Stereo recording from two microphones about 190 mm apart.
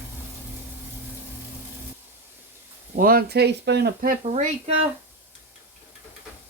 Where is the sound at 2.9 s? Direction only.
50° right (ahead or behind).